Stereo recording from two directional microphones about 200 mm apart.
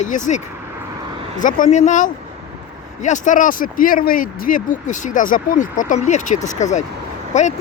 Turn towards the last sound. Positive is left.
turn(degrees=35)  # may be behind; listen again after turning